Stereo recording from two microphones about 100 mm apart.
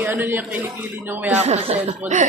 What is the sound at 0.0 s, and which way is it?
A man's voice, 20° right (ahead or behind).